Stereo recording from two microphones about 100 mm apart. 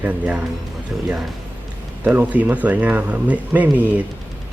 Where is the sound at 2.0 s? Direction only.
15° right (ahead or behind).